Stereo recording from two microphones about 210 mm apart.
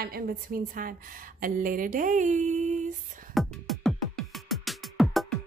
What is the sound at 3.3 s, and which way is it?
Music, centre (ahead or behind).